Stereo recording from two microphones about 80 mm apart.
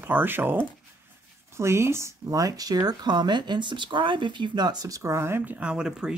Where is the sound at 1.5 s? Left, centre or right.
Right.